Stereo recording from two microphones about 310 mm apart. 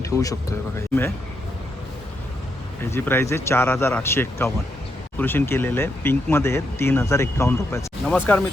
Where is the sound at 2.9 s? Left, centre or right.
Centre.